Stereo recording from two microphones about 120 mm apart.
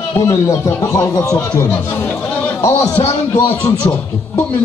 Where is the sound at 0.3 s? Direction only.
25° left (ahead or behind).